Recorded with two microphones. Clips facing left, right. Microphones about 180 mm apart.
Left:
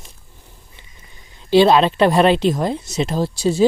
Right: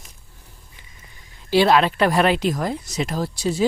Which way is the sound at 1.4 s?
25° left (ahead or behind).